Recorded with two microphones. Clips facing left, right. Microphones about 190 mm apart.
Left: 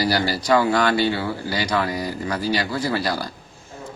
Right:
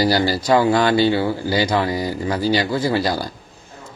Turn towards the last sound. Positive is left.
turn(degrees=-25)  # may be behind; listen again after turning